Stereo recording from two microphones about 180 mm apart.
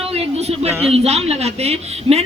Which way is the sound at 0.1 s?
35° right (ahead or behind).